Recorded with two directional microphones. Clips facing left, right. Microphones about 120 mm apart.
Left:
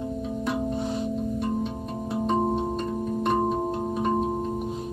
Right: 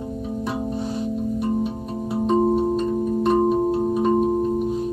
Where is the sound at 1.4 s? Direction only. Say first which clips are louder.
Right 4 dB; 10° right (ahead or behind).